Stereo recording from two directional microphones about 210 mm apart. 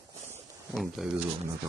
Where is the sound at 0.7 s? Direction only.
Centre (ahead or behind).